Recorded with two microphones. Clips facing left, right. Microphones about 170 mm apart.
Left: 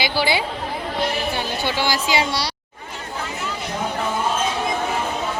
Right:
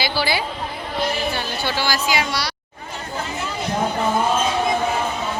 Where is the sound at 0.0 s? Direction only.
20° left (ahead or behind).